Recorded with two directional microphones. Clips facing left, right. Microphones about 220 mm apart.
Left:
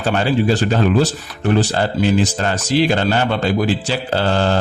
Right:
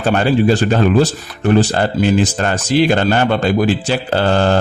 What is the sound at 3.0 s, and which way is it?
Speech, 50° right (ahead or behind).